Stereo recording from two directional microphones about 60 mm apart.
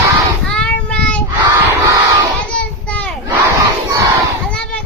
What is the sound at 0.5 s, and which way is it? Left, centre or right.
Child singing, centre.